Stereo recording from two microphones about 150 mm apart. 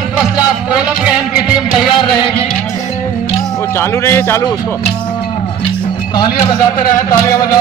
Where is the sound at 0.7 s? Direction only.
10° right (ahead or behind).